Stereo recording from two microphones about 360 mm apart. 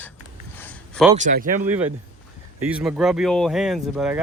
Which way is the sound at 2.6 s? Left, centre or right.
Centre.